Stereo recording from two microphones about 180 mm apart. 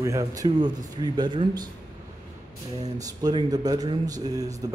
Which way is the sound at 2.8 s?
20° right (ahead or behind).